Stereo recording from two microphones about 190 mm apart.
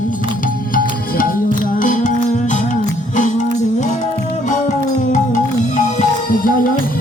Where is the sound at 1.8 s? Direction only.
45° left (ahead or behind).